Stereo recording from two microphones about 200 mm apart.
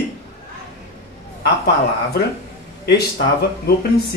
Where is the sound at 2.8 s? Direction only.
50° left (ahead or behind).